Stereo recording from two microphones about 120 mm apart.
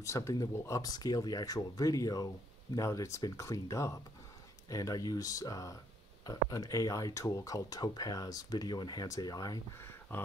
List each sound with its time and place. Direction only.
0.0 s speech: 25° left (ahead or behind)
10.1 s speech: 15° left (ahead or behind)